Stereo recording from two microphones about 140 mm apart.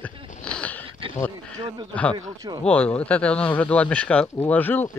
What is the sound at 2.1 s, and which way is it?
Speech, 30° right (ahead or behind).